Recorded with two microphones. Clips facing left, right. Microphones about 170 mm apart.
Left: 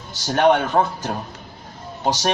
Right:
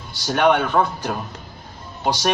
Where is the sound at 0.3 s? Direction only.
35° left (ahead or behind).